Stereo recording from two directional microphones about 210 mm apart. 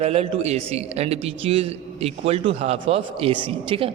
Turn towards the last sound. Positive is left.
turn(degrees=-25)  # may be behind; listen again after turning